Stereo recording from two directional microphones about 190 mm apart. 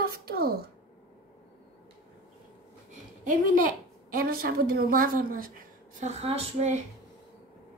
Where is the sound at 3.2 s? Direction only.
45° right (ahead or behind).